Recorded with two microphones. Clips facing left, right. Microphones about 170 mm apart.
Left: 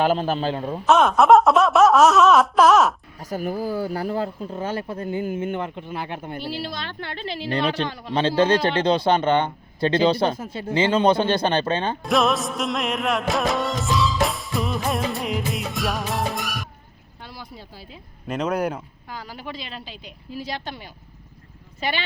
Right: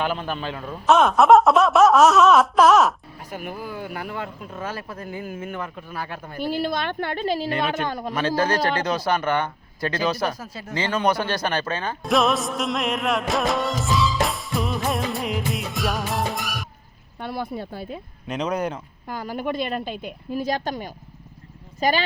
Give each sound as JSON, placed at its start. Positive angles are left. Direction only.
{"t": 0.0, "sound": "a man's voice", "side_deg": 35}
{"t": 0.9, "sound": "wail", "side_deg": 0}
{"t": 3.2, "sound": "speech", "side_deg": 40}
{"t": 6.4, "sound": "a woman's voice", "side_deg": -50}
{"t": 7.5, "sound": "a man's voice", "side_deg": 35}
{"t": 7.9, "sound": "a woman's voice", "side_deg": -45}
{"t": 8.4, "sound": "speech", "side_deg": 25}
{"t": 12.0, "sound": "music", "side_deg": 0}
{"t": 17.2, "sound": "speech", "side_deg": -55}
{"t": 18.3, "sound": "speech", "side_deg": 5}
{"t": 19.0, "sound": "a woman's voice", "side_deg": -50}